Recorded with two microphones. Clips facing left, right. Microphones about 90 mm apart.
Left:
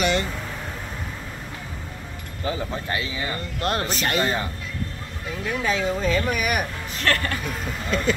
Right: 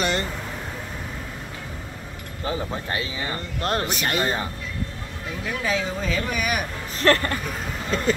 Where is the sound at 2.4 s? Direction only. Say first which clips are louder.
Even; 30° right (ahead or behind).